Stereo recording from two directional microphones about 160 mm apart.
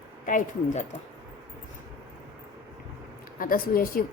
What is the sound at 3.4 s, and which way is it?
Speech, 65° left (ahead or behind).